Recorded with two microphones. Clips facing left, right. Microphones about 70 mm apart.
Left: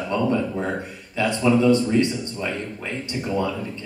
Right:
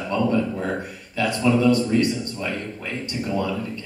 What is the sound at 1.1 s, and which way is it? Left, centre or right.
Speech, left.